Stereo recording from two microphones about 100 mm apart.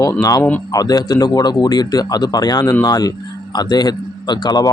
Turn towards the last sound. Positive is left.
turn(degrees=45)  # may be behind; listen again after turning